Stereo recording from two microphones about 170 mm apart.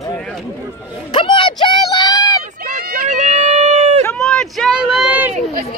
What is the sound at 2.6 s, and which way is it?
Run, 60° right (ahead or behind).